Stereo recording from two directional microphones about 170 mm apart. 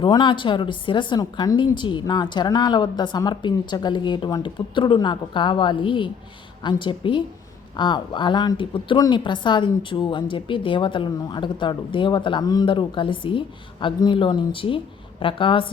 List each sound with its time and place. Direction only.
0.0 s a woman's voice: 25° left (ahead or behind)